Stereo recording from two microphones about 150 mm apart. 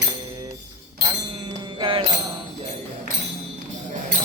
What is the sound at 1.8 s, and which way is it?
Music, 35° right (ahead or behind).